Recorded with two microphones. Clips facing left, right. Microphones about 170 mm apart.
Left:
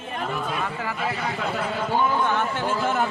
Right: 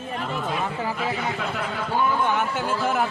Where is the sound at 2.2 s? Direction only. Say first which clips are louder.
Even; 10° right (ahead or behind).